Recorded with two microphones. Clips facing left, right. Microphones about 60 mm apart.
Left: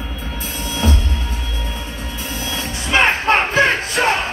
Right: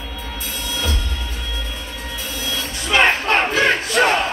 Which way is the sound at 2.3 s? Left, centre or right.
Left.